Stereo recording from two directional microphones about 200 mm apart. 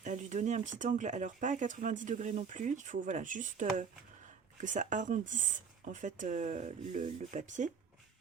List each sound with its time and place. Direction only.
0.0 s speech: 40° right (ahead or behind)